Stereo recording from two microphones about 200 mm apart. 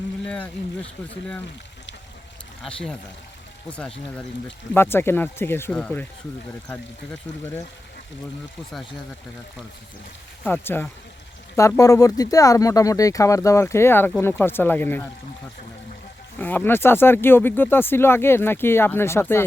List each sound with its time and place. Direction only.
0.3 s speech: 5° left (ahead or behind)
3.7 s speech: 5° left (ahead or behind)
10.4 s speech: 10° left (ahead or behind)
16.4 s speech: 10° left (ahead or behind)